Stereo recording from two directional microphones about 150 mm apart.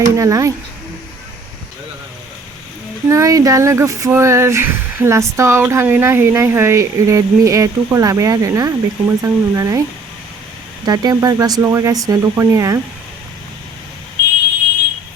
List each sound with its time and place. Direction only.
0.0 s speech: 20° right (ahead or behind)
3.1 s speech: 20° right (ahead or behind)
10.8 s speech: 25° right (ahead or behind)